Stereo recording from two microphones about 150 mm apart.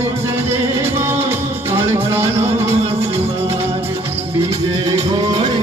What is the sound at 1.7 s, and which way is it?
Music, 15° right (ahead or behind).